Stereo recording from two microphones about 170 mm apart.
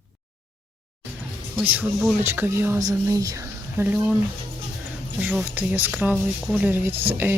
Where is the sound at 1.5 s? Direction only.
10° right (ahead or behind).